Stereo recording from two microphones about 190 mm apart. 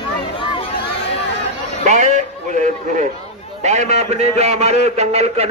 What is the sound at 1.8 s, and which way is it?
A man's voice, 40° right (ahead or behind).